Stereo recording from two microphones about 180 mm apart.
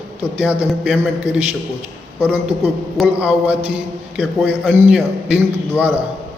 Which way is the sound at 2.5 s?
35° right (ahead or behind).